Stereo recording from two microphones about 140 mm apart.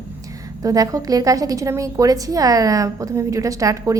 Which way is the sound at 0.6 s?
25° right (ahead or behind).